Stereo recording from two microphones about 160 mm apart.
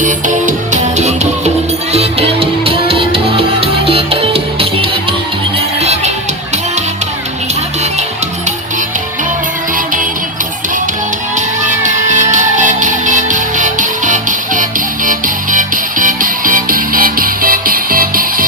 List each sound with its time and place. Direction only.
0.0 s music: 50° right (ahead or behind); by 4.9 s 35° right (ahead or behind)
9.7 s music: 60° right (ahead or behind)
11.3 s music: 50° right (ahead or behind)